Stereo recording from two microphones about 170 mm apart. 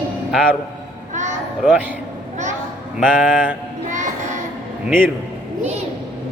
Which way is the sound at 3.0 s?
10° right (ahead or behind).